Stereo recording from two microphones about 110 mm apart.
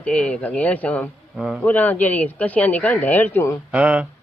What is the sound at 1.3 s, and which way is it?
Insect, 5° right (ahead or behind).